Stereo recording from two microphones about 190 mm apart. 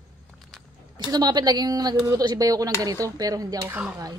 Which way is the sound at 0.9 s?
20° right (ahead or behind).